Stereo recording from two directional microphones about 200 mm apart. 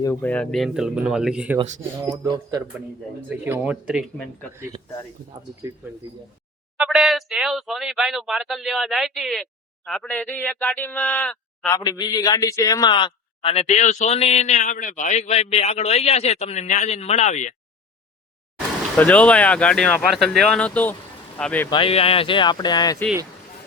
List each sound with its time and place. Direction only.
0.0 s speech: 10° left (ahead or behind)
2.0 s speech: 20° right (ahead or behind)
3.2 s speech: 10° right (ahead or behind)
6.7 s speech: centre (ahead or behind)
11.7 s a man's voice: 20° left (ahead or behind); by 17.5 s 35° left (ahead or behind)
18.9 s speech: 5° left (ahead or behind)
21.7 s speech: 25° left (ahead or behind)